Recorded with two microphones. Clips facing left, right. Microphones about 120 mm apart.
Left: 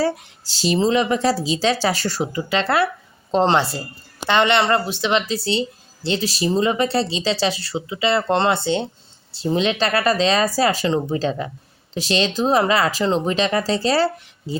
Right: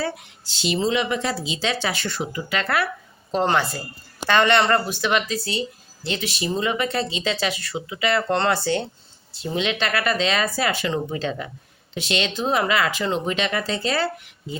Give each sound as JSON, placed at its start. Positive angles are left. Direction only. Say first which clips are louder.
{"t": 0.0, "sound": "speech", "louder": "left 6 dB", "side_deg": 35}
{"t": 9.3, "sound": "speech", "louder": "left 5 dB", "side_deg": 30}